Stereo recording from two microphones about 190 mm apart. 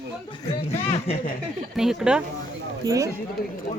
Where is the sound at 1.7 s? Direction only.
5° right (ahead or behind).